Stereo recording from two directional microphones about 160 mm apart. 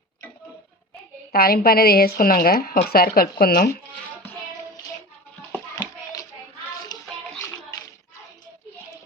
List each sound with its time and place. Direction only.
1.3 s a woman's voice: 70° left (ahead or behind)
6.9 s music: 25° left (ahead or behind)